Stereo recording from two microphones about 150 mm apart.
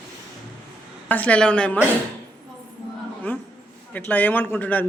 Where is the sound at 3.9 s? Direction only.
10° left (ahead or behind).